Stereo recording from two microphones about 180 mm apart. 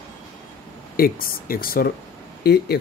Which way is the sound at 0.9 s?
55° left (ahead or behind).